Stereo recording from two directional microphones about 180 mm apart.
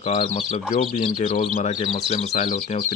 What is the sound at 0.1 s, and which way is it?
Speech, 40° left (ahead or behind).